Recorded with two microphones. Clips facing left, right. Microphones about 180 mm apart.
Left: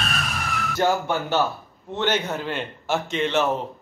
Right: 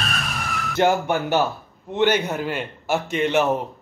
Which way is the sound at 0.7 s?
15° right (ahead or behind).